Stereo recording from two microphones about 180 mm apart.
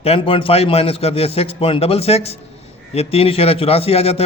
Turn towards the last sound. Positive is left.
turn(degrees=35)  # may be behind; listen again after turning